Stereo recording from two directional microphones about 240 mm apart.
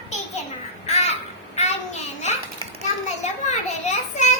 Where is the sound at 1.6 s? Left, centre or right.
Left.